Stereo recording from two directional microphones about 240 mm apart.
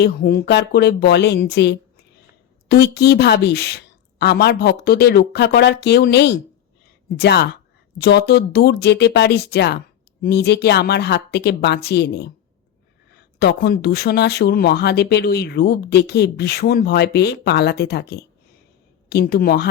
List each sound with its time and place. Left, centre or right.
0.0 s speech: left
13.4 s speech: left